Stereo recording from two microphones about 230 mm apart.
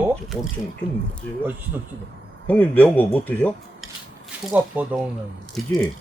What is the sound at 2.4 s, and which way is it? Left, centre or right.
Speech, centre.